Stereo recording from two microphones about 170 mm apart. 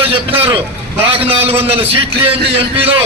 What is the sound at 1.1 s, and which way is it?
Speech, 30° right (ahead or behind).